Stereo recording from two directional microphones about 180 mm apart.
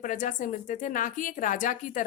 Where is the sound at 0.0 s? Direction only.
45° left (ahead or behind).